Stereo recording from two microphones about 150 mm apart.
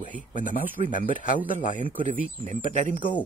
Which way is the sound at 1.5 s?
60° left (ahead or behind).